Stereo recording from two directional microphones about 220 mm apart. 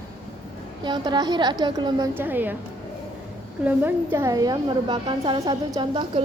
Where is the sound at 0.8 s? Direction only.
20° right (ahead or behind).